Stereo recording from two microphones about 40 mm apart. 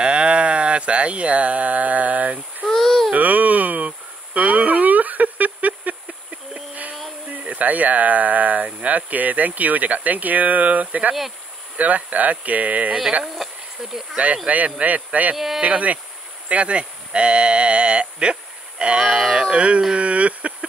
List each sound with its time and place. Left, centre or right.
0.0 s speech: right
2.7 s speech: centre
3.2 s a sound: right
7.2 s speech: right
13.2 s speech: centre
14.1 s speech: right
15.3 s speech: centre
15.6 s speech: right; by 19.2 s centre
19.5 s speech: right